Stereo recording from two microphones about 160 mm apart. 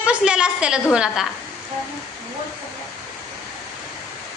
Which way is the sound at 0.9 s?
5° right (ahead or behind).